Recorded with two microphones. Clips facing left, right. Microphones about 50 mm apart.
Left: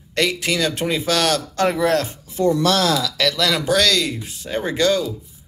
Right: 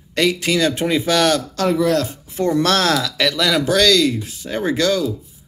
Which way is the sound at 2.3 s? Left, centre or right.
Right.